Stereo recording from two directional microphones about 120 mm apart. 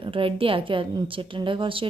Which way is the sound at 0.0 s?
50° right (ahead or behind).